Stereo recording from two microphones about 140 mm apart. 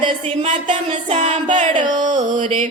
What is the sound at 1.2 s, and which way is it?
Music, 60° right (ahead or behind).